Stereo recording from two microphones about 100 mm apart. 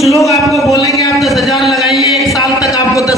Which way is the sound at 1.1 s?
Centre (ahead or behind).